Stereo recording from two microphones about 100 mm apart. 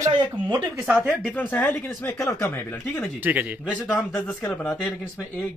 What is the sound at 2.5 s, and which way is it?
Speech, 15° left (ahead or behind).